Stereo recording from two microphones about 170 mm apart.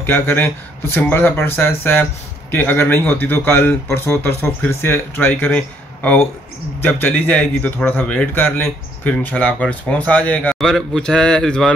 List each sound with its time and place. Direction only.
0.0 s speech: 10° left (ahead or behind)
6.8 s speech: 10° left (ahead or behind)